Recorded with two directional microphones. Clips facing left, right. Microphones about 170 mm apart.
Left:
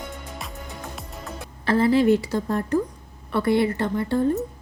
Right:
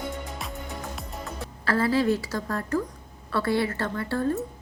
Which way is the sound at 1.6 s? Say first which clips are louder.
Left 5 dB; 20° left (ahead or behind).